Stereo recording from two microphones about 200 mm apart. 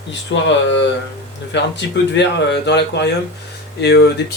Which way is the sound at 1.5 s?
60° left (ahead or behind).